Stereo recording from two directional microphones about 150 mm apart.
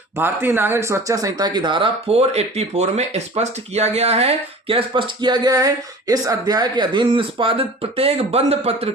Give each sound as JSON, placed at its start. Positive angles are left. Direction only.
{"t": 0.2, "sound": "speech", "side_deg": -15}